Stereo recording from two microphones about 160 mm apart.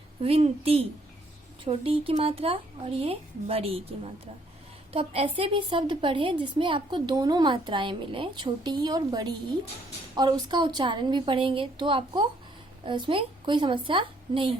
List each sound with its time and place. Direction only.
0.2 s a woman's voice: 40° right (ahead or behind)